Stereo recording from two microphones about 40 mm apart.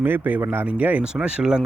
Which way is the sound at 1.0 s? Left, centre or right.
Right.